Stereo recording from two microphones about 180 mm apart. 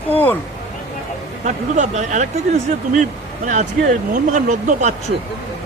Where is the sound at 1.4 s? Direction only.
40° right (ahead or behind).